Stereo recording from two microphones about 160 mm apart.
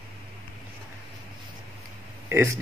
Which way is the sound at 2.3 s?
15° right (ahead or behind).